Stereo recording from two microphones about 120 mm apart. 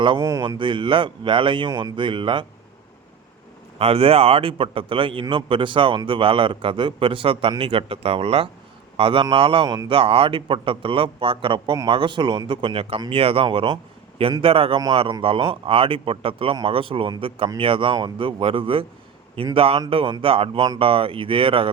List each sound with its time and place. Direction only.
0.2 s speech: 25° right (ahead or behind)
0.4 s a man's voice: 40° right (ahead or behind)
3.8 s a man's voice: 55° right (ahead or behind)